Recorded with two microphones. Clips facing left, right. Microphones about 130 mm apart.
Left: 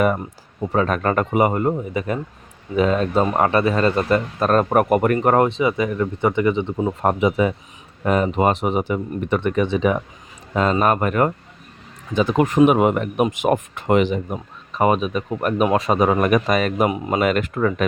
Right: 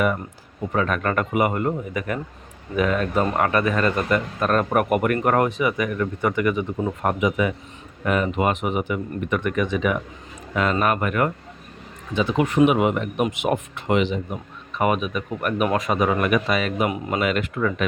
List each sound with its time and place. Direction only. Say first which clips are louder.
0.7 s speech: left 3 dB; 35° left (ahead or behind)